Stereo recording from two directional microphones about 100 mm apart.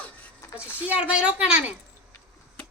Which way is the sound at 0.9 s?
15° right (ahead or behind).